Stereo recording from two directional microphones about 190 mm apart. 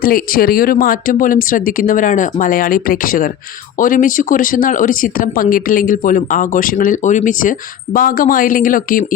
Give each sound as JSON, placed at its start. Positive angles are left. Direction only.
{"t": 0.0, "sound": "speech", "side_deg": 50}